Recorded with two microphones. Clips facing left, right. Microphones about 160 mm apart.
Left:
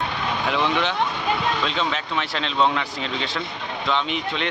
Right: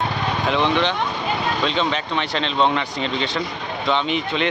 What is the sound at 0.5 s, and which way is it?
A man's voice, 5° left (ahead or behind).